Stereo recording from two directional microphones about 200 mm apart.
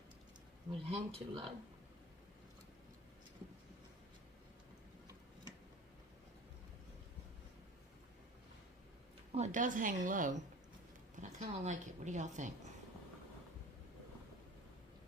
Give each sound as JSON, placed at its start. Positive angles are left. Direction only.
{"t": 0.7, "sound": "speech", "side_deg": -25}
{"t": 9.3, "sound": "speech", "side_deg": -35}